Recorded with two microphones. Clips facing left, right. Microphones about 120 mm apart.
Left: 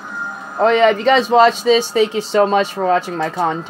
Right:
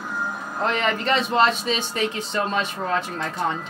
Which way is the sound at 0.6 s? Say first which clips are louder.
Left 11 dB; 90° left.